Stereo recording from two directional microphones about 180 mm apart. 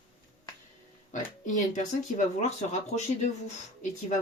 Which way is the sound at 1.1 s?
45° left (ahead or behind).